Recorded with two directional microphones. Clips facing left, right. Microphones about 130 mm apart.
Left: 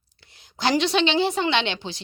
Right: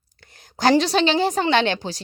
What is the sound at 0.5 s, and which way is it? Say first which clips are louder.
Speech: right 4 dB; 40° right (ahead or behind).